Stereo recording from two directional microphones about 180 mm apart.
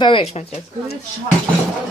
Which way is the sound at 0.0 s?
30° left (ahead or behind).